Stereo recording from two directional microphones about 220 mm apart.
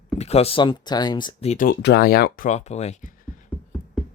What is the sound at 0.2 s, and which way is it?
Speech, 30° left (ahead or behind).